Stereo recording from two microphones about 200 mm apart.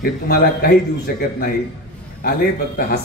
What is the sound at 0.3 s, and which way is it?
Speech, 50° left (ahead or behind).